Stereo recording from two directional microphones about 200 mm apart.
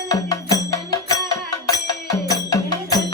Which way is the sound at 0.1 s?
15° left (ahead or behind).